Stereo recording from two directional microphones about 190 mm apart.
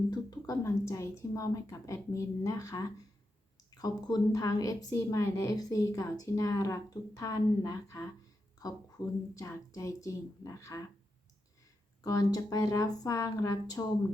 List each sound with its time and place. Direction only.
0.1 s a woman's voice: 20° left (ahead or behind)
12.0 s a woman's voice: 20° left (ahead or behind)